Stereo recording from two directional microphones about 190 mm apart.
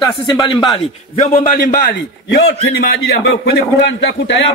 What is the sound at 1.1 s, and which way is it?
Speech, 40° left (ahead or behind).